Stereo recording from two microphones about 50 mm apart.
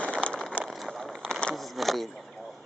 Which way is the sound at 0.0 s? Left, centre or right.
Left.